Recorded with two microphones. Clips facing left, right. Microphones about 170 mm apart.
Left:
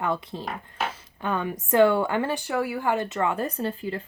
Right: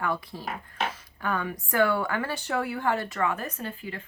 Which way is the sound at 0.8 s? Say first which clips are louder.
Left 2 dB; 25° left (ahead or behind).